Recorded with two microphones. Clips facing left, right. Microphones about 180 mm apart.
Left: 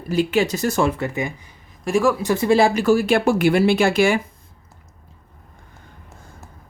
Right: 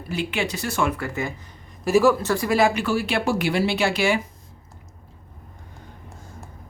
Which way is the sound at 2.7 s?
45° left (ahead or behind).